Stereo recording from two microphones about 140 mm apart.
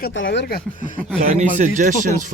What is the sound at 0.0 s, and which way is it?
Speech, 90° left.